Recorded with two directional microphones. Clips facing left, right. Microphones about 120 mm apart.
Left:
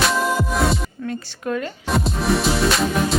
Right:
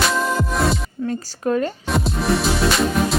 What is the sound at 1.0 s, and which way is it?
Speech, 40° right (ahead or behind).